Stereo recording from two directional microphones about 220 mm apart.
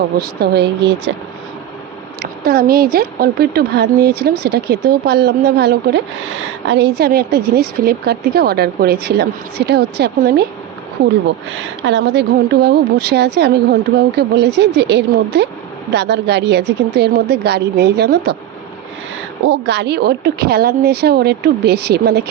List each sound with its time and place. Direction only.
0.2 s a woman's voice: 50° right (ahead or behind)
2.4 s a woman's voice: 45° right (ahead or behind)
11.5 s a woman's voice: 55° right (ahead or behind)
19.5 s a woman's voice: 50° right (ahead or behind)